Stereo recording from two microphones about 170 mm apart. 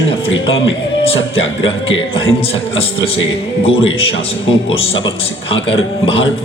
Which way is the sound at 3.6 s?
35° left (ahead or behind).